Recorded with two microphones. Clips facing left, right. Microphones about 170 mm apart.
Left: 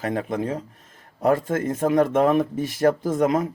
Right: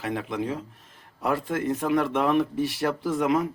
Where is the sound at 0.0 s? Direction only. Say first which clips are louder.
Left 4 dB; 45° left (ahead or behind).